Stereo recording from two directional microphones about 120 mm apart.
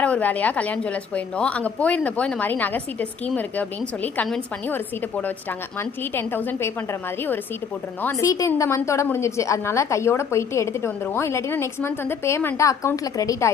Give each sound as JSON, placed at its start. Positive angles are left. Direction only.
{"t": 0.0, "sound": "a woman's voice", "side_deg": 10}
{"t": 8.2, "sound": "a woman's voice", "side_deg": 25}